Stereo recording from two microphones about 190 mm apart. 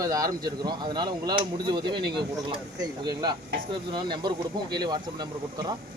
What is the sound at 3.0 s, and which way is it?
Speech, 20° right (ahead or behind).